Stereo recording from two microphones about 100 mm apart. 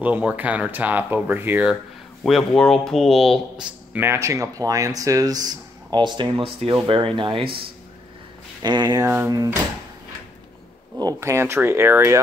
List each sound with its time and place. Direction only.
0.0 s speech: 15° right (ahead or behind)
2.2 s speech: centre (ahead or behind)
3.9 s speech: 20° right (ahead or behind); by 7.4 s 50° right (ahead or behind)
8.6 s speech: 45° right (ahead or behind)
9.0 s speech: 25° right (ahead or behind)
11.1 s speech: 25° right (ahead or behind)